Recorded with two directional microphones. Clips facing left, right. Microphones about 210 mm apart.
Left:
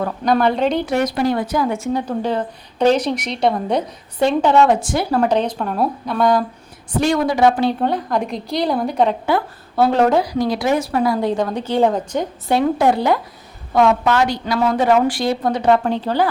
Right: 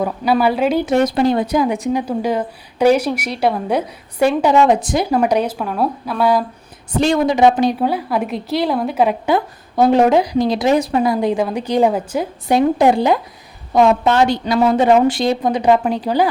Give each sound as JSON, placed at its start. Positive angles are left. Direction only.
{"t": 0.0, "sound": "speech", "side_deg": -5}
{"t": 0.9, "sound": "speech", "side_deg": -25}
{"t": 7.0, "sound": "a woman's voice", "side_deg": -20}
{"t": 7.8, "sound": "a woman's voice", "side_deg": -5}
{"t": 9.2, "sound": "a woman's voice", "side_deg": -15}